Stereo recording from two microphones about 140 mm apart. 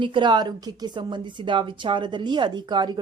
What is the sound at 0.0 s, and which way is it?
Speech, 35° right (ahead or behind).